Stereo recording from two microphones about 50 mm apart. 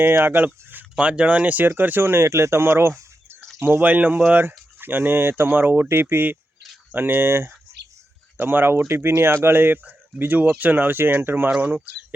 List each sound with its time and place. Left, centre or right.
0.3 s speech: right
0.9 s speech: right
1.6 s speech: right
2.2 s speech: right
3.6 s speech: right
8.9 s speech: right